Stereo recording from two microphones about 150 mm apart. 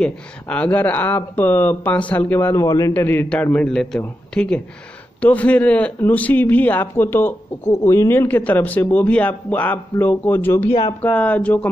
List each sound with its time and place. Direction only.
0.0 s a man's voice: 10° left (ahead or behind)
10.7 s speech: 30° left (ahead or behind)
11.0 s a man's voice: 10° left (ahead or behind)